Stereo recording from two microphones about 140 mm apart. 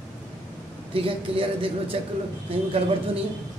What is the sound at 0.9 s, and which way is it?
Speech, 40° right (ahead or behind).